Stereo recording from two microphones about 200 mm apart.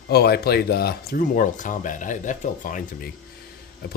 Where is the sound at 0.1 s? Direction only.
50° left (ahead or behind).